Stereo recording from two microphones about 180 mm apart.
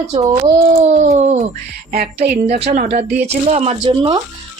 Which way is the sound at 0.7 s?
40° right (ahead or behind).